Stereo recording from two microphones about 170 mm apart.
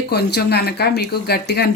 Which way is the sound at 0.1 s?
75° left (ahead or behind).